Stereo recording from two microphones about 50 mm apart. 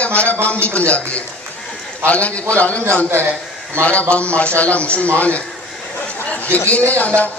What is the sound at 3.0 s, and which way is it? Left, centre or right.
Speech, right.